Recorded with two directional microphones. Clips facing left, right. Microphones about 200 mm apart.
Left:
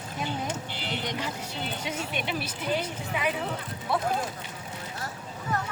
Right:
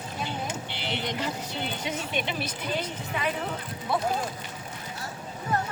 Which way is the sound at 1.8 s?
10° left (ahead or behind).